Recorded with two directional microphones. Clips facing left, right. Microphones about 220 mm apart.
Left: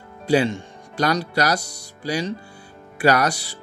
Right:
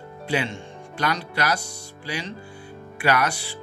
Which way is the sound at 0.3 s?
40° left (ahead or behind).